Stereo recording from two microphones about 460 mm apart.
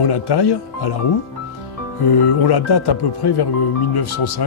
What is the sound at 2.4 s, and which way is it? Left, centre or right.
Speech, left.